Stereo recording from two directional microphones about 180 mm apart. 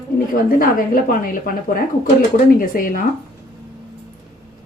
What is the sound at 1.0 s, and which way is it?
Speech, 50° left (ahead or behind).